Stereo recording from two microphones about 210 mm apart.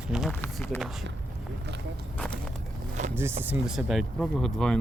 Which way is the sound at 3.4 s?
5° right (ahead or behind).